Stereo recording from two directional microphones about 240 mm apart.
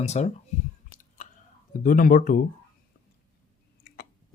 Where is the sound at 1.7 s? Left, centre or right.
Left.